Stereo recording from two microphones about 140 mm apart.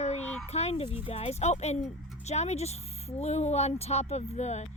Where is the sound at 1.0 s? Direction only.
45° left (ahead or behind).